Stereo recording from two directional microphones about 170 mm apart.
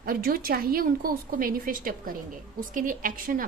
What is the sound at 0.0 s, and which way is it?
A woman's voice, 60° right (ahead or behind).